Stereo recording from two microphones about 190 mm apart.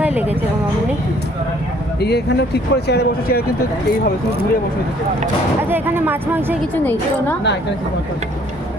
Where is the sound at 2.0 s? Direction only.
60° left (ahead or behind).